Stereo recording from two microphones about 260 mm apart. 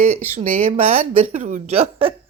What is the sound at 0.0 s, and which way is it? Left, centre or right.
Speech, right.